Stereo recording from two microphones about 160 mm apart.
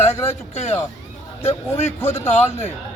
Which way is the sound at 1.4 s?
15° left (ahead or behind).